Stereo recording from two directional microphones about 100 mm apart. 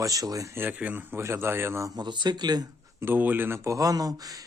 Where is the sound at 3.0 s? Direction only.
20° right (ahead or behind); by 4.4 s 40° right (ahead or behind).